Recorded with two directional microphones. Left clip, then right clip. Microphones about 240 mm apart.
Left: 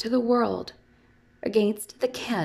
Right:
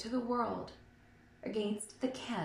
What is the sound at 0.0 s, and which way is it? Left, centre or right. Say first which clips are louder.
A woman's voice: left 12 dB; left.